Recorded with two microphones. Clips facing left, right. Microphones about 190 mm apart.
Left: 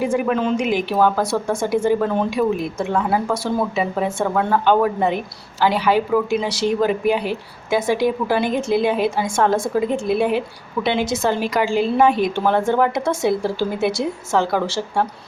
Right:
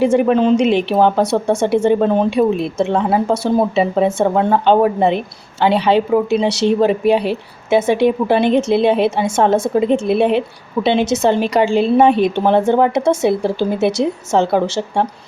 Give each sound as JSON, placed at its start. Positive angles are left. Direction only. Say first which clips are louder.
{"t": 0.0, "sound": "speech", "louder": "right 6 dB", "side_deg": -25}
{"t": 8.4, "sound": "a woman's voice", "louder": "right 5 dB", "side_deg": -70}
{"t": 8.8, "sound": "speech", "louder": "right 5 dB", "side_deg": -25}